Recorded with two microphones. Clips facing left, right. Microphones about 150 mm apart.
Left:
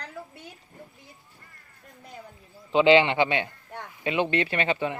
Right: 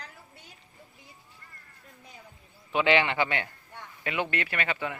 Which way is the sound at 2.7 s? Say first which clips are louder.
Left 6 dB; 25° left (ahead or behind).